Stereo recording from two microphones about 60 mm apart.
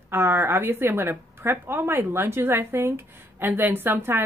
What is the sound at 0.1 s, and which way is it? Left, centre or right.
A woman's voice, right.